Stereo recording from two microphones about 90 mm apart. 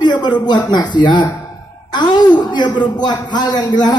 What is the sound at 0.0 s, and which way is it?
A man's voice, 55° left (ahead or behind).